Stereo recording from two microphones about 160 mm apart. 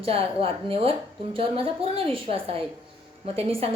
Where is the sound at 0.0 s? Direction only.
35° right (ahead or behind).